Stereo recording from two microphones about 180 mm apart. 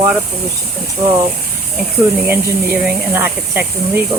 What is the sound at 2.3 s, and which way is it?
Speech, 10° right (ahead or behind).